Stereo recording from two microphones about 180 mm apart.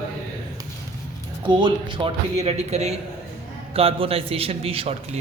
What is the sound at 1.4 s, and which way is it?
A man's voice, 25° right (ahead or behind).